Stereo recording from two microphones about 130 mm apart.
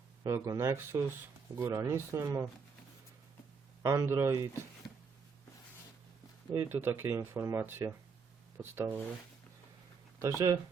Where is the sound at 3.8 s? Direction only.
25° right (ahead or behind).